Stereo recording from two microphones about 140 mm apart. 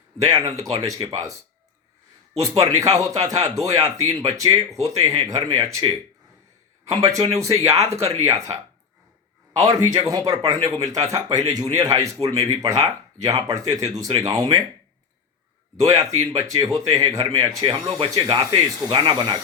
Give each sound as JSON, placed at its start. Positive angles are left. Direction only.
{"t": 0.2, "sound": "speech", "side_deg": -25}
{"t": 2.4, "sound": "speech", "side_deg": -25}
{"t": 6.9, "sound": "speech", "side_deg": -25}
{"t": 9.6, "sound": "speech", "side_deg": -25}
{"t": 15.8, "sound": "speech", "side_deg": -25}